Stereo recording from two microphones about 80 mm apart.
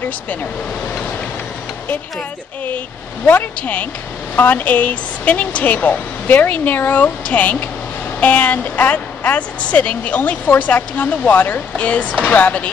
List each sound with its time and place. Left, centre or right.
3.3 s a woman's voice: left